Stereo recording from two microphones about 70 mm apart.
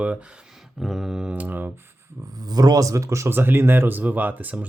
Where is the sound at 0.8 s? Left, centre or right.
Centre.